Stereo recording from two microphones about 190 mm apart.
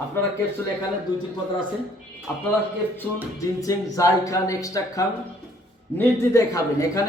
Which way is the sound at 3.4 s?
20° left (ahead or behind).